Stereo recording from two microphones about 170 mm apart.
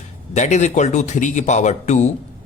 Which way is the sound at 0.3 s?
45° left (ahead or behind).